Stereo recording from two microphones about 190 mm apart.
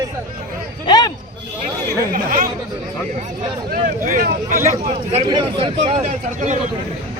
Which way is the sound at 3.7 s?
45° right (ahead or behind).